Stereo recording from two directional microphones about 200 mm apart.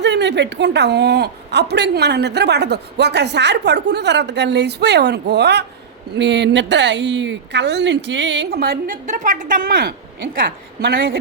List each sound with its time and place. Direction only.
0.0 s a woman's voice: 60° right (ahead or behind)